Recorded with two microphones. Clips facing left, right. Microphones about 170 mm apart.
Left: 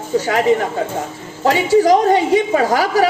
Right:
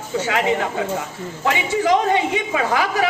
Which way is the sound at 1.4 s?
40° left (ahead or behind).